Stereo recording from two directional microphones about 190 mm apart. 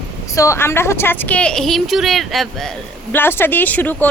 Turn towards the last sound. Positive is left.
turn(degrees=10)  # may be behind; listen again after turning